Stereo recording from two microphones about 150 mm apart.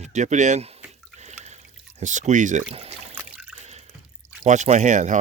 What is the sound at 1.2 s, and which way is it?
Drip, 50° right (ahead or behind).